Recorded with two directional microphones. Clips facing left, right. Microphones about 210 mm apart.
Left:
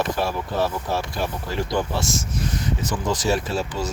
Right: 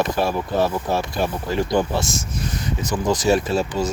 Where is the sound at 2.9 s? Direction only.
15° right (ahead or behind).